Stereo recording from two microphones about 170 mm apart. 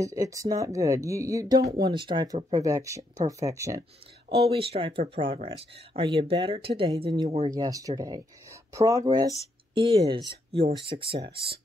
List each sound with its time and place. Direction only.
0.0 s speech: 20° right (ahead or behind)
4.5 s speech: 35° right (ahead or behind)
7.4 s speech: 20° right (ahead or behind)